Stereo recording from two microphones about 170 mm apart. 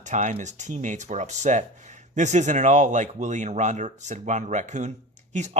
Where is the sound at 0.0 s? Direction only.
45° right (ahead or behind).